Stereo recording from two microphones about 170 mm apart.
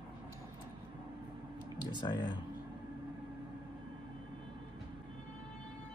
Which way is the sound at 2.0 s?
25° left (ahead or behind).